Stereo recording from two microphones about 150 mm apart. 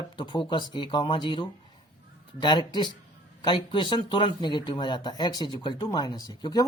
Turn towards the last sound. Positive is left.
turn(degrees=25)  # may be behind; listen again after turning